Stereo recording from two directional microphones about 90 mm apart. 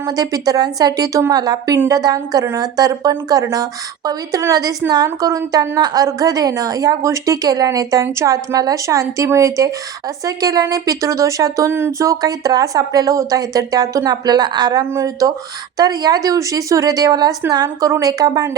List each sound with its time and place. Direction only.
0.2 s a woman's voice: 45° right (ahead or behind)